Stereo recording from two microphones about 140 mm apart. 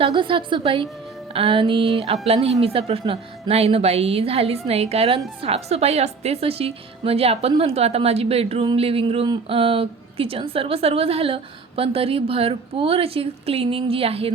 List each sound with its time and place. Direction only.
0.0 s a woman's voice: 35° right (ahead or behind)